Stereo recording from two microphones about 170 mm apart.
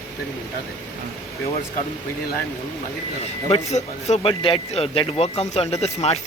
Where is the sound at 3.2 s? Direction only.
35° left (ahead or behind).